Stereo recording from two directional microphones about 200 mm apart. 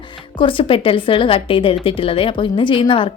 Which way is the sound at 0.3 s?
25° left (ahead or behind).